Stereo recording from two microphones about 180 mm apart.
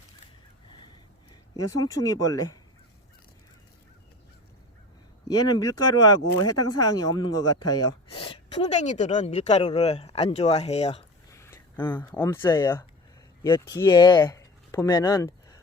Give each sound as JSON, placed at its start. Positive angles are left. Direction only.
{"t": 1.3, "sound": "speech", "side_deg": 20}
{"t": 5.3, "sound": "speech", "side_deg": 20}
{"t": 11.3, "sound": "a sound", "side_deg": 15}
{"t": 12.1, "sound": "speech", "side_deg": 10}
{"t": 13.4, "sound": "speech", "side_deg": 25}